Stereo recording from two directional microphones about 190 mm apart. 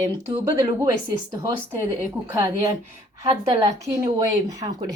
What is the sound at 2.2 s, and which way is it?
A woman's voice, 15° right (ahead or behind).